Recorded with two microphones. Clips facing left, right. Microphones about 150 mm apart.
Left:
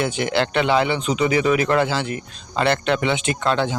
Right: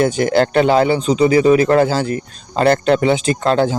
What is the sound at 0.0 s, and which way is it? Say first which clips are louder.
Speech: right 7 dB; 40° right (ahead or behind).